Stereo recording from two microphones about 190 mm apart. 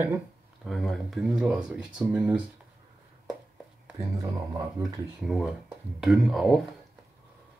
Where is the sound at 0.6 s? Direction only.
Centre (ahead or behind).